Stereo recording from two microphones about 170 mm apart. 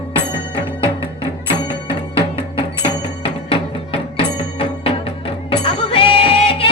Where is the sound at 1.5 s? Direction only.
30° left (ahead or behind).